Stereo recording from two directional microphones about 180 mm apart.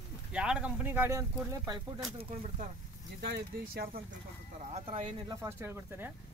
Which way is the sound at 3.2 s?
60° right (ahead or behind).